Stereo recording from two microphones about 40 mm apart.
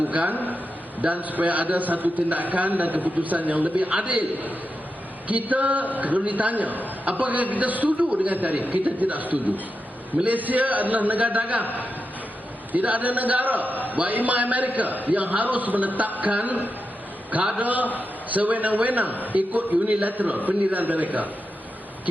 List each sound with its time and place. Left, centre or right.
0.0 s a man's voice: right
12.7 s a man's voice: right
17.6 s a man's voice: right